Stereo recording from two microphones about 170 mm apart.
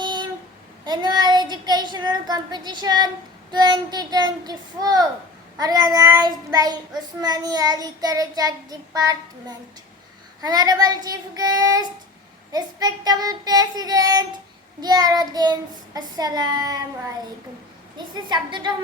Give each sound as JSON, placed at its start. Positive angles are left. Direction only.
{"t": 0.0, "sound": "a sound", "side_deg": -25}
{"t": 0.9, "sound": "child singing", "side_deg": -25}
{"t": 17.9, "sound": "child singing", "side_deg": -25}